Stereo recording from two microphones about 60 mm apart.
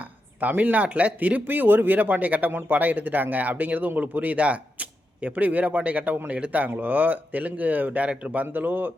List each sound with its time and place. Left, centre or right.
0.3 s speech: right